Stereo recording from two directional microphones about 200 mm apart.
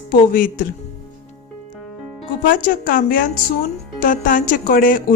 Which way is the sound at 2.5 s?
45° left (ahead or behind).